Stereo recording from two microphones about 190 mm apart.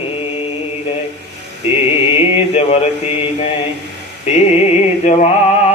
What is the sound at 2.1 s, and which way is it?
Mantra, 30° left (ahead or behind).